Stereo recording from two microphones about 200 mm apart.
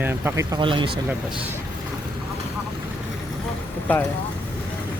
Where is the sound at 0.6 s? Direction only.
25° right (ahead or behind).